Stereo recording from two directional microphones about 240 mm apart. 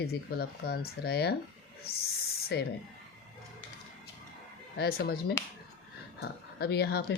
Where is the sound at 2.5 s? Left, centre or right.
Left.